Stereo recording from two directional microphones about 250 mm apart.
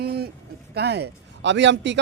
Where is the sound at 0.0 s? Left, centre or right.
Right.